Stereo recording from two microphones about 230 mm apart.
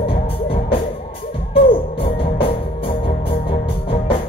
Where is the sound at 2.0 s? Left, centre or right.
Left.